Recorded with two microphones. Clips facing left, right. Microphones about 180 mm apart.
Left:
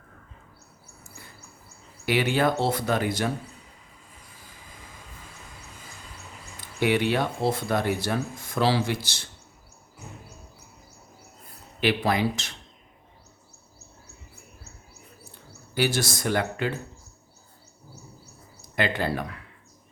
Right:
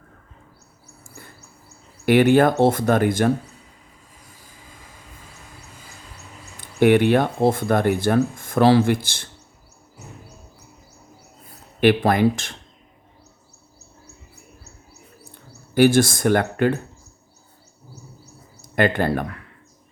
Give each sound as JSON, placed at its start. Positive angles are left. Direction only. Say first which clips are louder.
{"t": 2.0, "sound": "speech", "louder": "right 9 dB", "side_deg": -50}
{"t": 6.6, "sound": "speech", "louder": "right 8 dB", "side_deg": -55}
{"t": 11.8, "sound": "speech", "louder": "right 7 dB", "side_deg": -50}
{"t": 15.7, "sound": "speech", "louder": "right 11 dB", "side_deg": -50}
{"t": 18.6, "sound": "speech", "louder": "right 7 dB", "side_deg": -55}